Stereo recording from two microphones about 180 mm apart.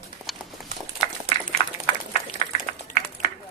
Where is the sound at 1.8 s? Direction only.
35° left (ahead or behind).